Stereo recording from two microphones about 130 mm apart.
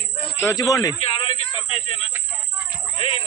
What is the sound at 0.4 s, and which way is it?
Speech, 25° left (ahead or behind).